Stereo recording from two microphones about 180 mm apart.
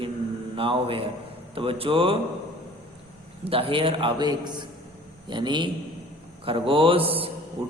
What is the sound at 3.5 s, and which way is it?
A man's voice, 30° right (ahead or behind).